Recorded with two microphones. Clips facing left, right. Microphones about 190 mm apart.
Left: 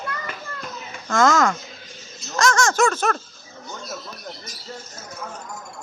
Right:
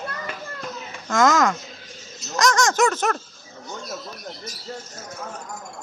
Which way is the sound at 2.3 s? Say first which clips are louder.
Even; 15° right (ahead or behind).